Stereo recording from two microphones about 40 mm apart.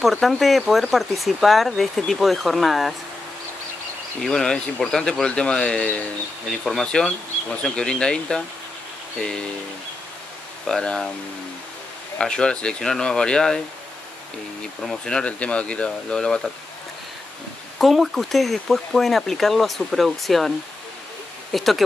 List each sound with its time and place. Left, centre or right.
0.0 s speech: centre
4.3 s speech: left
5.8 s speech: left
6.5 s speech: centre
7.6 s speech: left
10.8 s speech: left
12.2 s speech: left
15.0 s speech: left
17.7 s speech: centre